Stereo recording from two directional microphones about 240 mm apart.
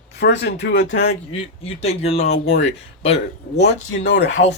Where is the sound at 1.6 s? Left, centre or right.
Left.